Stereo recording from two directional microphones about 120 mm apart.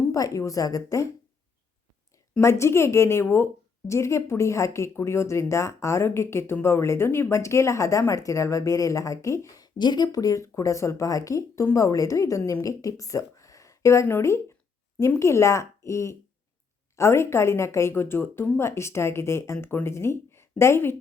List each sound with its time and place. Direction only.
0.1 s a woman's voice: 30° left (ahead or behind)
2.4 s a woman's voice: 25° left (ahead or behind)
9.7 s a woman's voice: 40° left (ahead or behind); by 20.9 s 20° left (ahead or behind)